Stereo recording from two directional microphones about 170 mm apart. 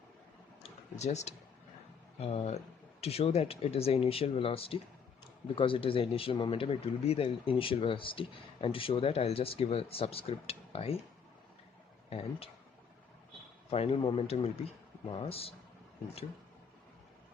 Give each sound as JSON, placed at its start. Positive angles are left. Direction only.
{"t": 0.9, "sound": "speech", "side_deg": 40}
{"t": 13.7, "sound": "speech", "side_deg": 35}